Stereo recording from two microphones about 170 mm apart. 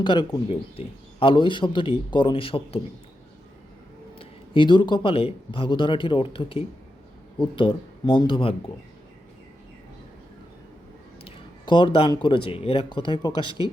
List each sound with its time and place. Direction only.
0.0 s speech: 25° left (ahead or behind)
4.2 s speech: 30° left (ahead or behind)
11.2 s speech: 30° left (ahead or behind)